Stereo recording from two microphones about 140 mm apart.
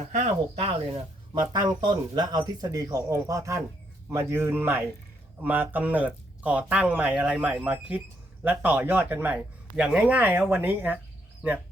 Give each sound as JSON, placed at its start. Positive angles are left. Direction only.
{"t": 0.1, "sound": "speech", "side_deg": -50}
{"t": 1.3, "sound": "speech", "side_deg": -30}